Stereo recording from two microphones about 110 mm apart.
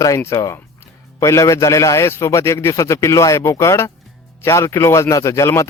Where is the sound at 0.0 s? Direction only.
30° left (ahead or behind).